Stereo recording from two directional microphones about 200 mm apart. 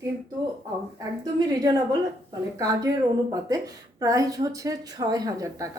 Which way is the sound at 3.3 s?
15° right (ahead or behind).